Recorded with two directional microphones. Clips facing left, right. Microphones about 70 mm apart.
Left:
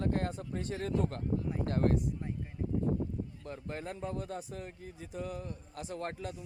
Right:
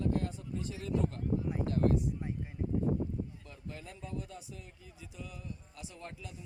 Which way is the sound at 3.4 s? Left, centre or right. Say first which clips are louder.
Left 7 dB; left.